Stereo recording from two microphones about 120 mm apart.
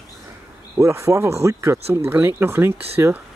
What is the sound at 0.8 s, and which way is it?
Speech, 25° right (ahead or behind).